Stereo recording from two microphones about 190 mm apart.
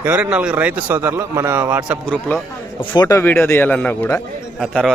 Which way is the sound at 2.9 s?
20° left (ahead or behind).